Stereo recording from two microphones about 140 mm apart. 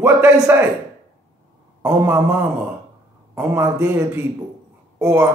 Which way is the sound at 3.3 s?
15° right (ahead or behind).